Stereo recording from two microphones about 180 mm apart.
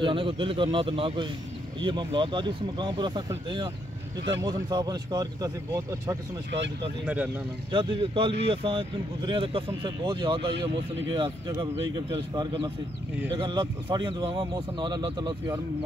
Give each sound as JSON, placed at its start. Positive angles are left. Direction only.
{"t": 0.0, "sound": "a man's voice", "side_deg": -30}
{"t": 7.7, "sound": "a man's voice", "side_deg": -25}